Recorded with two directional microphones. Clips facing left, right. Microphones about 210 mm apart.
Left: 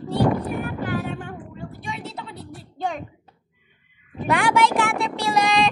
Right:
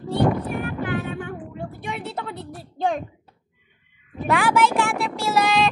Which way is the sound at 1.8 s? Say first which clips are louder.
Right 3 dB; 55° right (ahead or behind).